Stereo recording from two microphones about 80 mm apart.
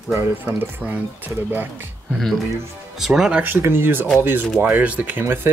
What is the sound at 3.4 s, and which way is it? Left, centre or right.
Speech, right.